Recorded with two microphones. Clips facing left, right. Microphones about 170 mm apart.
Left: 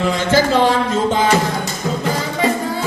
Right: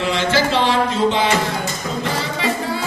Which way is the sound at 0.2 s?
45° left (ahead or behind).